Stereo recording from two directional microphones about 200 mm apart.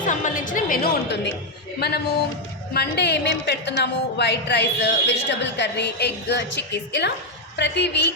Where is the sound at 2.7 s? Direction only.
55° left (ahead or behind).